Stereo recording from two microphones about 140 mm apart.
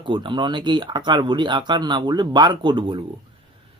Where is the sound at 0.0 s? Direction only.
35° right (ahead or behind).